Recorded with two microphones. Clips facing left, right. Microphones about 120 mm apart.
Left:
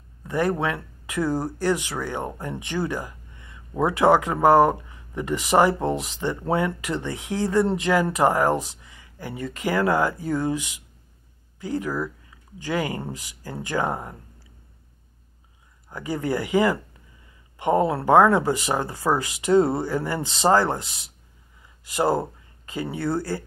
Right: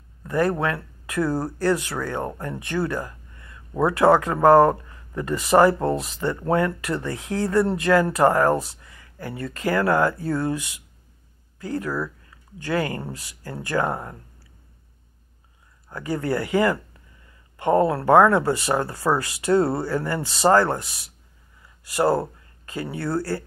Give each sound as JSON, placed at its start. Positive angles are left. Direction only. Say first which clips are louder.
{"t": 0.6, "sound": "speech", "louder": "right 1 dB", "side_deg": 25}
{"t": 11.6, "sound": "speech", "louder": "even", "side_deg": 20}
{"t": 15.9, "sound": "speech", "louder": "right 1 dB", "side_deg": 20}